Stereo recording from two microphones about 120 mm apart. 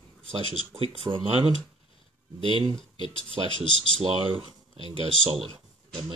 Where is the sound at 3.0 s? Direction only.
45° left (ahead or behind).